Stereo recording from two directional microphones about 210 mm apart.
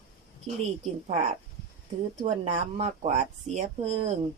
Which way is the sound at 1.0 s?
30° right (ahead or behind).